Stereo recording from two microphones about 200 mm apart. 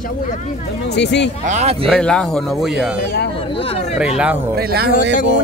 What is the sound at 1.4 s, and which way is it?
Speech, 35° right (ahead or behind).